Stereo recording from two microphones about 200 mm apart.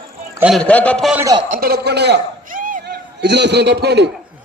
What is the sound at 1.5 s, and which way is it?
A man's voice, 50° right (ahead or behind).